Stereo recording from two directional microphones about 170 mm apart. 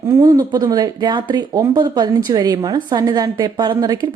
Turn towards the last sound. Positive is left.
turn(degrees=-25)  # may be behind; listen again after turning